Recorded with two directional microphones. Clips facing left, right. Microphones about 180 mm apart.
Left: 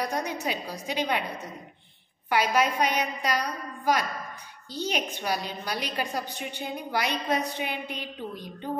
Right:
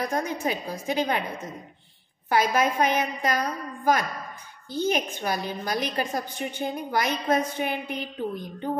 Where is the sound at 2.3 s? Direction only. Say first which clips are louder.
Right 2 dB; 45° right (ahead or behind).